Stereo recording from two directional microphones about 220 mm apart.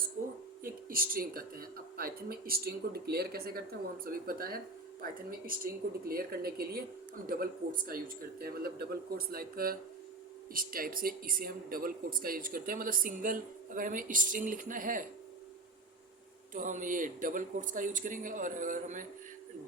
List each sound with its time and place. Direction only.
0.6 s speech: 40° right (ahead or behind)
6.1 s speech: 45° right (ahead or behind)
16.6 s speech: 35° right (ahead or behind)